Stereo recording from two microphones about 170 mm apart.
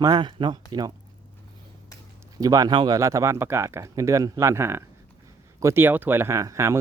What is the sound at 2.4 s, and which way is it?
Speech, 20° right (ahead or behind).